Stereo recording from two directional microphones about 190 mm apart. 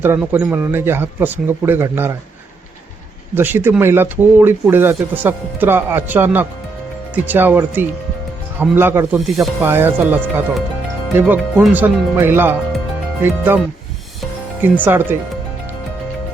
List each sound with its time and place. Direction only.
0.0 s speech: 10° right (ahead or behind)
3.3 s speech: 10° right (ahead or behind)
14.6 s speech: 10° right (ahead or behind)